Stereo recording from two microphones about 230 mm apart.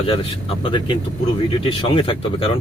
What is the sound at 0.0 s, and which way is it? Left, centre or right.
A man's voice, left.